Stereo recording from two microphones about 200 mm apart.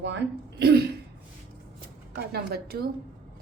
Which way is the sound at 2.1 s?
55° right (ahead or behind).